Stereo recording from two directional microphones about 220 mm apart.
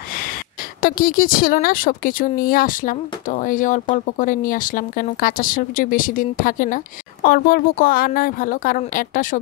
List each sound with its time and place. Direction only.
0.8 s speech: 40° left (ahead or behind)